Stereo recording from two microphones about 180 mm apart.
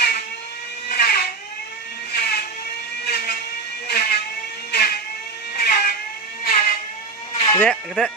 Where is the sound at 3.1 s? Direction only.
60° left (ahead or behind).